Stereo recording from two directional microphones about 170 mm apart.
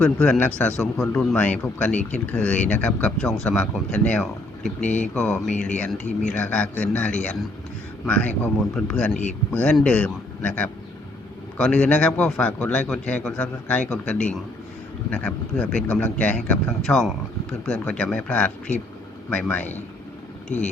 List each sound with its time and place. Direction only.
0.0 s a man's voice: 5° left (ahead or behind)
20.5 s speech: 45° left (ahead or behind)